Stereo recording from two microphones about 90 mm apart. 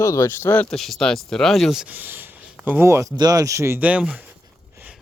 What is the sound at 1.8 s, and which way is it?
Speech, 20° right (ahead or behind).